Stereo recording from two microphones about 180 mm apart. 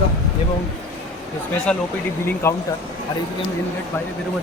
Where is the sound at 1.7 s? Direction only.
5° left (ahead or behind).